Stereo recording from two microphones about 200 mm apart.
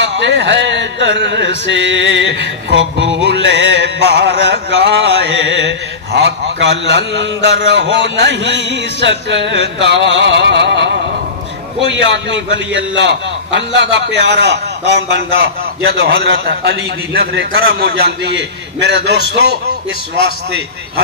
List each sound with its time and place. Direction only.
0.0 s a man's voice: 60° right (ahead or behind)